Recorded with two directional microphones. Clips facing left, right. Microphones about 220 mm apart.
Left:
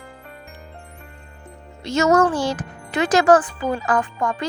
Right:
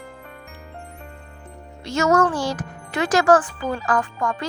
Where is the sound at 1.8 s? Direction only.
20° left (ahead or behind).